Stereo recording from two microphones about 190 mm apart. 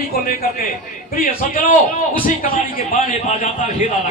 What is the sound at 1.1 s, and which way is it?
A man's voice, 50° left (ahead or behind).